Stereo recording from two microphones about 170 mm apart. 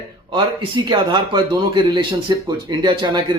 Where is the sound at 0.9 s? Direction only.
25° right (ahead or behind).